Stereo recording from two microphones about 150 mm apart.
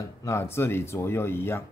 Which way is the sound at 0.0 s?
20° left (ahead or behind).